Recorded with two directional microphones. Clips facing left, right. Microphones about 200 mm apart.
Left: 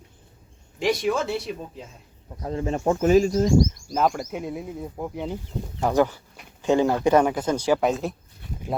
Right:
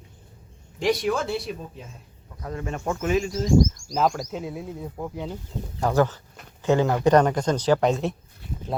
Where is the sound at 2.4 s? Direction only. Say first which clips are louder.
Left 5 dB; 30° left (ahead or behind).